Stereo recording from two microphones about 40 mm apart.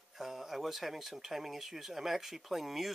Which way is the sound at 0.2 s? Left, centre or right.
Centre.